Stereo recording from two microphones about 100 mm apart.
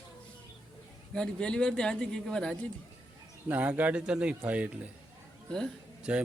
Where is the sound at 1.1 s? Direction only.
10° left (ahead or behind).